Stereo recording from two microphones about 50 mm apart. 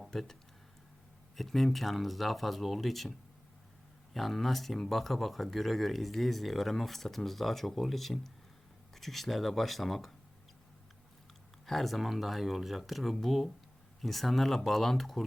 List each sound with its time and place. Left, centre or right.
0.1 s speech: centre
1.4 s speech: centre
4.1 s speech: centre
11.6 s speech: centre